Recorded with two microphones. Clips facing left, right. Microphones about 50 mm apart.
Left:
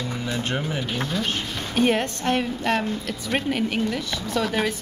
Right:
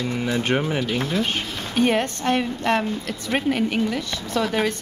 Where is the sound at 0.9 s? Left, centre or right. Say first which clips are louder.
Right 3 dB; centre.